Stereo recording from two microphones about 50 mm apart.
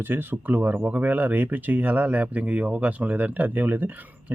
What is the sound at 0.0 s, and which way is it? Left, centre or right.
Speech, right.